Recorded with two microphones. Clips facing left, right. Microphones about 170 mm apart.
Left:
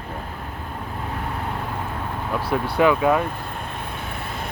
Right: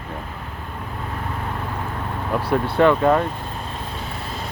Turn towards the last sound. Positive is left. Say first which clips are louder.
# right 2 dB
turn(degrees=5)  # may be behind; listen again after turning